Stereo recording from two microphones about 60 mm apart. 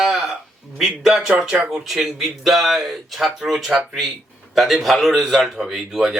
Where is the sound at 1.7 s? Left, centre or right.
Centre.